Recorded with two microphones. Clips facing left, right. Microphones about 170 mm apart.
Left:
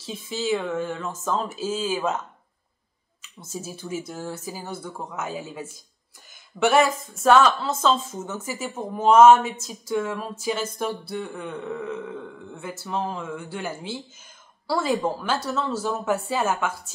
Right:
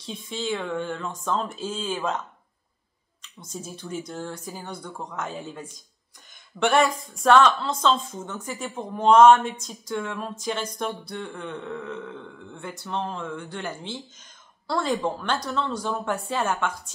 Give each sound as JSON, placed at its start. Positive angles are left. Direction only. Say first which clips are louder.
{"t": 0.0, "sound": "a woman's voice", "louder": "left 3 dB", "side_deg": 5}